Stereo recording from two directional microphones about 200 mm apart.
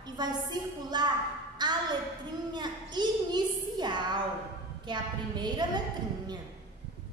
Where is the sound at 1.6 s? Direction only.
20° right (ahead or behind).